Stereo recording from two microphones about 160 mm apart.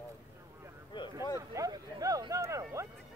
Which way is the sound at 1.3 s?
20° right (ahead or behind).